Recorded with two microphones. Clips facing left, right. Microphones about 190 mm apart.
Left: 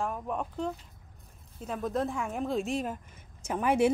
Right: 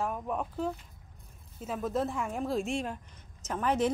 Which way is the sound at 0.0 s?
Centre (ahead or behind).